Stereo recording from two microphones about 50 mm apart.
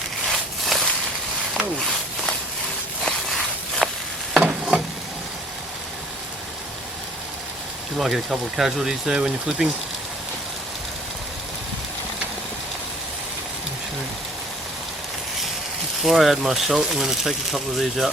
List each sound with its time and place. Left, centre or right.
0.3 s a sound: centre
3.0 s walk: centre
4.4 s stir: centre
7.9 s speech: centre
16.0 s speech: centre